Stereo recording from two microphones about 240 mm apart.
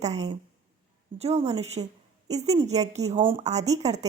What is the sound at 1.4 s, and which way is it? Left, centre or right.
Speech, right.